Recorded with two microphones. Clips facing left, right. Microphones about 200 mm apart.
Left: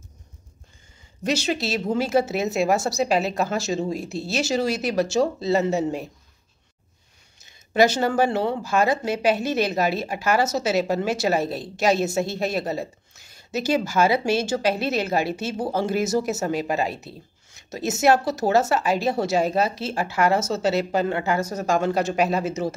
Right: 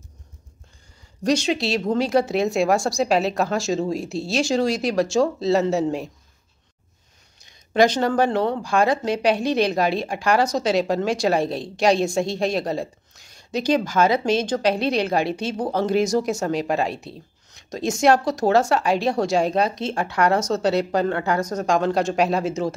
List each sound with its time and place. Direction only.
1.2 s a woman's voice: 5° left (ahead or behind)
7.3 s a woman's voice: 5° left (ahead or behind)